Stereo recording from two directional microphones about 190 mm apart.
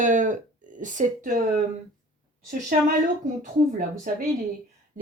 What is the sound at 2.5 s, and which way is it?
Speech, 45° right (ahead or behind).